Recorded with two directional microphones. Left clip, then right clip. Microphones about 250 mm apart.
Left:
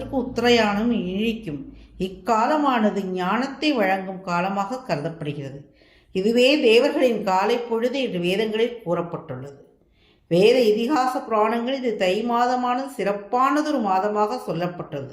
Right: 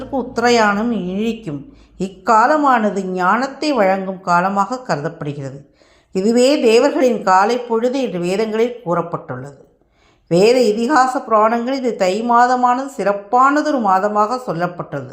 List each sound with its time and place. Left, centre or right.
0.1 s speech: centre
10.2 s speech: right